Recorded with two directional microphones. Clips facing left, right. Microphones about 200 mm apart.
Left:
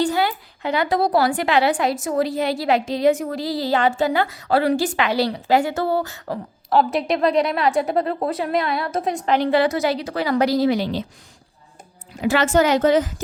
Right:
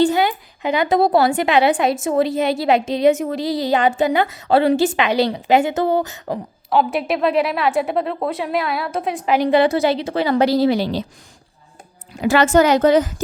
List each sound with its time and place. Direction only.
0.0 s a woman's voice: 20° right (ahead or behind)
6.7 s a woman's voice: centre (ahead or behind)
9.6 s a woman's voice: 30° right (ahead or behind)
12.2 s a woman's voice: 45° right (ahead or behind)